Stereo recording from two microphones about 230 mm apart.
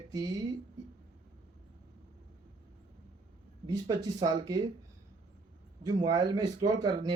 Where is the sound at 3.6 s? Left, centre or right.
Centre.